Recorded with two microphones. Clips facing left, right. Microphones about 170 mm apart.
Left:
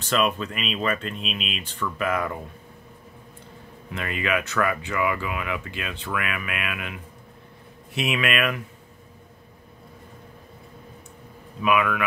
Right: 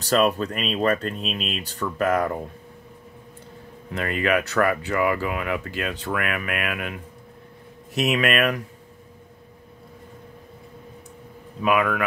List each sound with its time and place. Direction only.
0.0 s speech: 40° right (ahead or behind)
3.9 s speech: 40° right (ahead or behind)
11.6 s speech: 40° right (ahead or behind)